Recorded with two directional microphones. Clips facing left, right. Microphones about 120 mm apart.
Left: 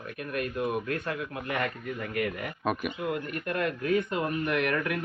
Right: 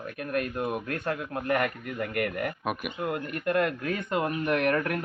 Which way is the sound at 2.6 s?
10° right (ahead or behind).